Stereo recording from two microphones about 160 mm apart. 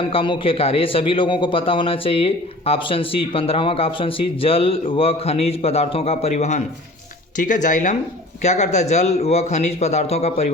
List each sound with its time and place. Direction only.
0.1 s a man's voice: 35° left (ahead or behind)